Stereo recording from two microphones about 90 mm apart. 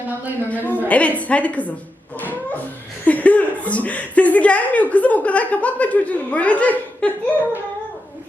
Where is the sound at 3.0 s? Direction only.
15° left (ahead or behind).